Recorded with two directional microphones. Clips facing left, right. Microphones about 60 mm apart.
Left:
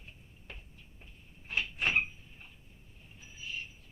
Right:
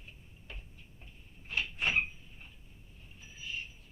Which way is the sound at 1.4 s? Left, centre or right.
Left.